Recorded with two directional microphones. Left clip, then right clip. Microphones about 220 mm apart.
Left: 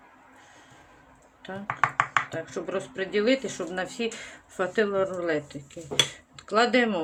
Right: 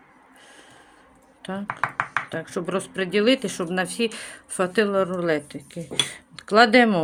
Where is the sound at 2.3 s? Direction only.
50° right (ahead or behind).